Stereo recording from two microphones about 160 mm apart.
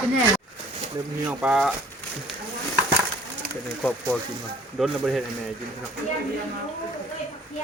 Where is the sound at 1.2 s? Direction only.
5° right (ahead or behind).